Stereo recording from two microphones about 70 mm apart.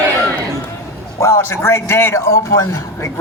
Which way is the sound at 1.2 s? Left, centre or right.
Left.